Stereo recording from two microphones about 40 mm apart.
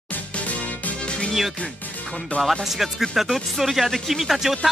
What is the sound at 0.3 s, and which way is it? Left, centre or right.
Music, left.